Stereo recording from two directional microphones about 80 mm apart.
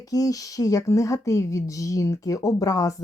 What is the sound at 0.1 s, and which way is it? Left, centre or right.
Speech, left.